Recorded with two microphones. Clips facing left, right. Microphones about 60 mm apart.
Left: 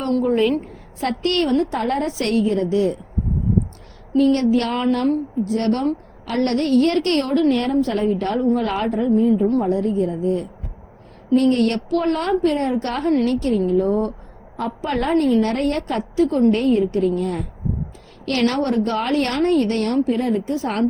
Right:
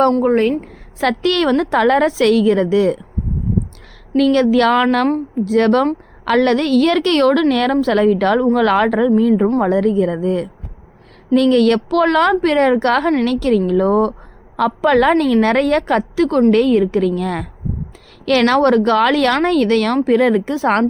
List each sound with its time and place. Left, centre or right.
0.1 s a woman's voice: right
0.9 s a woman's voice: right
4.7 s a woman's voice: right
11.4 s a woman's voice: right